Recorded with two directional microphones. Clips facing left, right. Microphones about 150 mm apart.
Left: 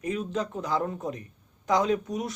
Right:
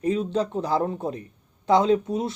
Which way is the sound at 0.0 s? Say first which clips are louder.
Right 6 dB; 30° right (ahead or behind).